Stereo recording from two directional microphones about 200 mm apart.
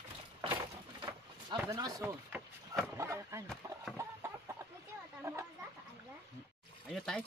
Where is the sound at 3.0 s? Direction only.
15° right (ahead or behind).